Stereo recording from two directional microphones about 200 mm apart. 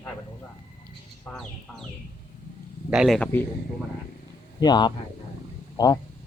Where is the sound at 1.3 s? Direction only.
Centre (ahead or behind).